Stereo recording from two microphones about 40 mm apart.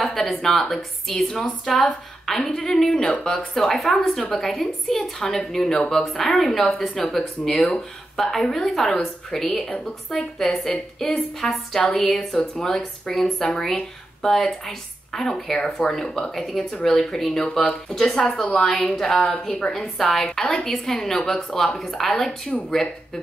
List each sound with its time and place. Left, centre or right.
0.0 s a woman's voice: centre
11.1 s a woman's voice: centre
11.9 s a woman's voice: centre
16.3 s a woman's voice: centre